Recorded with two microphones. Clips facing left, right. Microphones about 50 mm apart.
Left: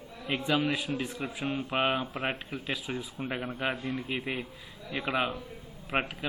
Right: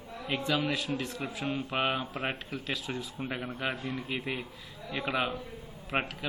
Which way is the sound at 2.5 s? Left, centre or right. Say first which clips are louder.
Left 1 dB; centre.